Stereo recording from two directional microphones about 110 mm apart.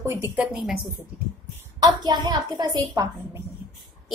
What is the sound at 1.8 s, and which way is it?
A woman's voice, 40° right (ahead or behind).